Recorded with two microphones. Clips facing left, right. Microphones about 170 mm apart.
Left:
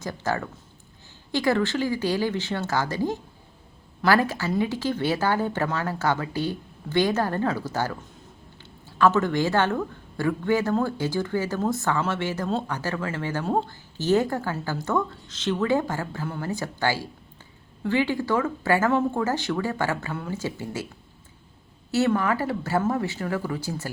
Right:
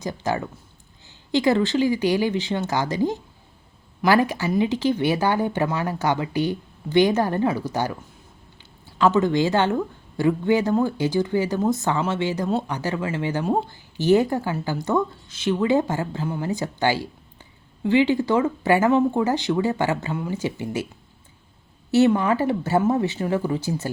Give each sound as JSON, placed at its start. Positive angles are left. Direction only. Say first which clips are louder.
{"t": 0.0, "sound": "speech", "louder": "right 2 dB", "side_deg": -15}
{"t": 9.0, "sound": "speech", "louder": "right 2 dB", "side_deg": -15}
{"t": 21.9, "sound": "speech", "louder": "right 5 dB", "side_deg": -20}